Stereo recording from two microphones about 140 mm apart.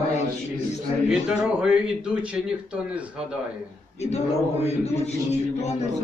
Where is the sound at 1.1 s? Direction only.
5° right (ahead or behind).